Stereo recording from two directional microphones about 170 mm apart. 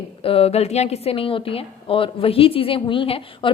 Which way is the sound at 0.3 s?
35° left (ahead or behind).